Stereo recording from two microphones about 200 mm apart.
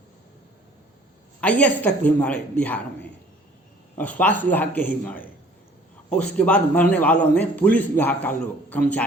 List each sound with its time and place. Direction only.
1.4 s a man's voice: 5° left (ahead or behind)